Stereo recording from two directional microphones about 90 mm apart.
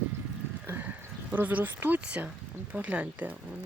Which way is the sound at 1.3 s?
20° right (ahead or behind).